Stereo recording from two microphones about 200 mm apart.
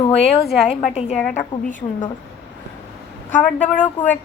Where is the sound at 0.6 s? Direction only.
35° left (ahead or behind).